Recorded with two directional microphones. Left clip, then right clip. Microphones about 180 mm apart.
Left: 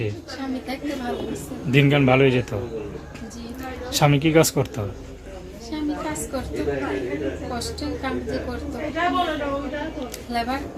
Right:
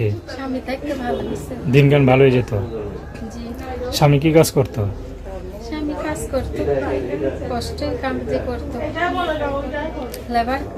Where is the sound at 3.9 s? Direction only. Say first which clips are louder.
Right 3 dB; 5° right (ahead or behind).